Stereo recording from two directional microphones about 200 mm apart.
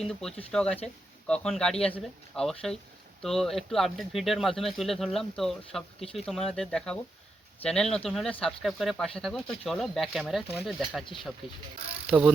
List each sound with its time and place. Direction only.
0.0 s speech: centre (ahead or behind)
11.0 s speech: 25° left (ahead or behind)